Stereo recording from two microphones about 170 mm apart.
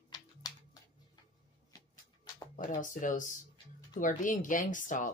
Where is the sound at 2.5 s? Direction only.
50° left (ahead or behind).